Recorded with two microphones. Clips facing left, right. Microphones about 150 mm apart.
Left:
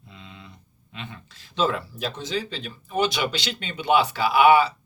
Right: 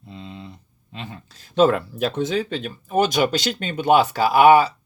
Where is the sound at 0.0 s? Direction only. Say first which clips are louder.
Right 8 dB; 35° right (ahead or behind).